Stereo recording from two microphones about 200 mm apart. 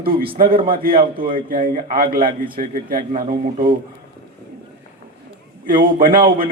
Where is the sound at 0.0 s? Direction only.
45° right (ahead or behind).